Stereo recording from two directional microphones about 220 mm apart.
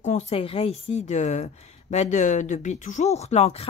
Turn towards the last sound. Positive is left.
turn(degrees=30)  # may be behind; listen again after turning